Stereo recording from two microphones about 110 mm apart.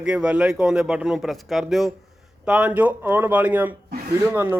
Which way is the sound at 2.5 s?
10° right (ahead or behind).